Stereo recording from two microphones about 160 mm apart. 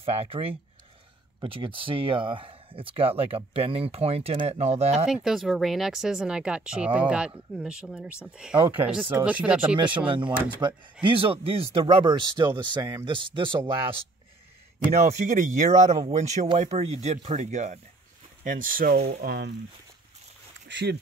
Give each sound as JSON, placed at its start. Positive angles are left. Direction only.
{"t": 0.0, "sound": "speech", "side_deg": -35}
{"t": 5.0, "sound": "speech", "side_deg": -5}
{"t": 10.0, "sound": "speech", "side_deg": -30}
{"t": 15.0, "sound": "speech", "side_deg": -45}
{"t": 18.4, "sound": "speech", "side_deg": -60}
{"t": 20.6, "sound": "speech", "side_deg": -90}